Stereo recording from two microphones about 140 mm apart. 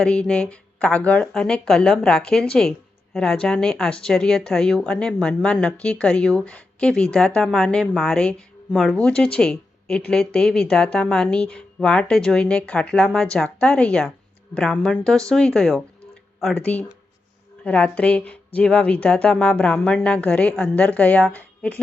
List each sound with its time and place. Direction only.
0.0 s speech: 5° left (ahead or behind)